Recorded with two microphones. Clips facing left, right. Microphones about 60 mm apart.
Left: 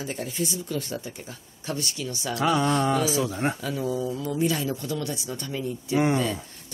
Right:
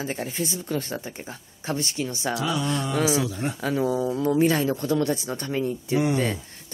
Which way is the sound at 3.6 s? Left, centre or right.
Right.